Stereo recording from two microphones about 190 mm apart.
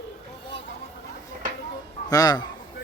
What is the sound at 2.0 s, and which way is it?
Speech, 20° left (ahead or behind).